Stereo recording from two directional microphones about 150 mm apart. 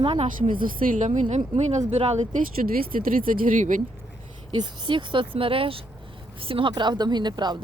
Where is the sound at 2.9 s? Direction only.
70° right (ahead or behind).